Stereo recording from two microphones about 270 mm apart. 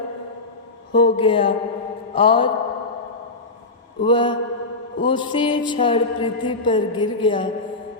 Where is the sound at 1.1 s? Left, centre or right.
Centre.